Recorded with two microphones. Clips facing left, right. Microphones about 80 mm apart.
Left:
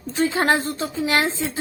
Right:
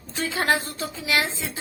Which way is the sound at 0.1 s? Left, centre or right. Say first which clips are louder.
Left 4 dB; left.